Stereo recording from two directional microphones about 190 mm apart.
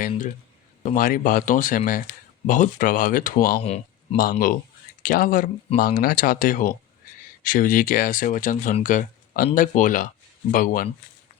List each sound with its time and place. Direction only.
0.8 s speech: 45° left (ahead or behind)
3.6 s speech: 30° left (ahead or behind)
4.2 s speech: 50° left (ahead or behind)